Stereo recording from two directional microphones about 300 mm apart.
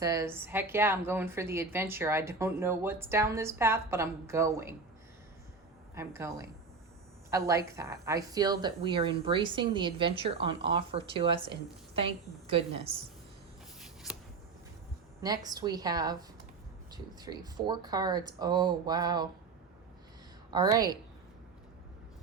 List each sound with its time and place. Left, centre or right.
0.0 s speech: centre
5.9 s a woman's voice: centre
15.2 s speech: centre
20.5 s speech: centre